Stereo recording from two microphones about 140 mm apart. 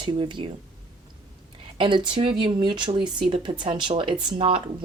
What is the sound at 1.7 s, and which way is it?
Speech, 35° right (ahead or behind).